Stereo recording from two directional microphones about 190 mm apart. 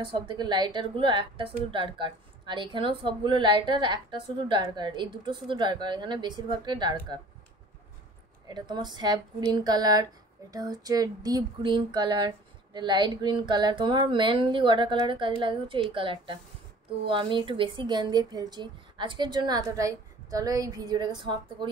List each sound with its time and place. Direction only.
0.0 s a woman's voice: 25° right (ahead or behind)
8.5 s a woman's voice: 20° right (ahead or behind)